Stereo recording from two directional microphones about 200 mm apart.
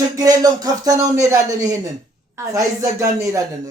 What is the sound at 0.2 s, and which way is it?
Speech, 20° right (ahead or behind).